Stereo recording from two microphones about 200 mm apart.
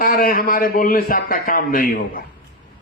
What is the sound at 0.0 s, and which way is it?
A man's voice, 45° left (ahead or behind).